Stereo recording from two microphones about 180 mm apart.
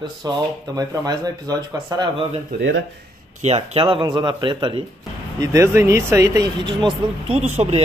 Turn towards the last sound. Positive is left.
turn(degrees=-35)  # may be behind; listen again after turning